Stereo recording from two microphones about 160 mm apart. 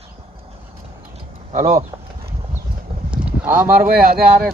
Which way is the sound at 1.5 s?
50° right (ahead or behind).